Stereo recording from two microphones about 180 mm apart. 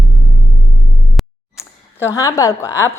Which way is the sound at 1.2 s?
Centre (ahead or behind).